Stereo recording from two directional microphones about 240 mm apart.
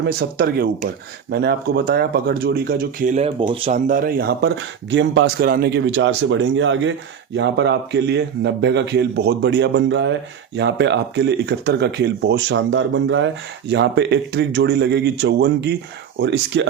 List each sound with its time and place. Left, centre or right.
0.0 s speech: right
3.2 s a man's voice: right